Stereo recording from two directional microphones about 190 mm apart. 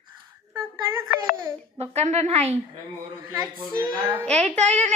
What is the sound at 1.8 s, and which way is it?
Speech, 35° right (ahead or behind).